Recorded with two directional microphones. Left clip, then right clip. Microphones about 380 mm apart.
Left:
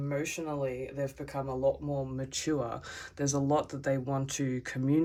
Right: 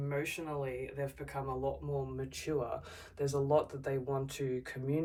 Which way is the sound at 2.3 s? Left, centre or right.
Left.